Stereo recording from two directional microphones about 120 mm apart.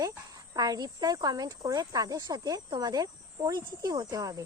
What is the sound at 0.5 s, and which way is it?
Speech, 35° right (ahead or behind).